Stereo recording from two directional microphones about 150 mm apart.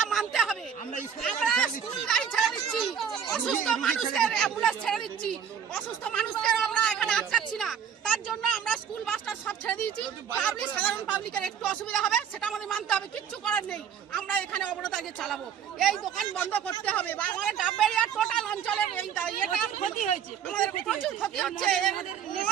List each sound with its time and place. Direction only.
0.0 s a sound: centre (ahead or behind)
4.1 s speech: 5° left (ahead or behind)
6.4 s a sound: 5° left (ahead or behind)
10.3 s speech: 5° left (ahead or behind)
13.4 s a sound: 5° left (ahead or behind)
15.8 s speech: centre (ahead or behind)
16.4 s speech: 10° left (ahead or behind)
19.8 s a woman's voice: 55° left (ahead or behind)
20.8 s speech: centre (ahead or behind)